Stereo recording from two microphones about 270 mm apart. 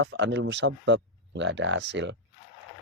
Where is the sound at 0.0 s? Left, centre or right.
Right.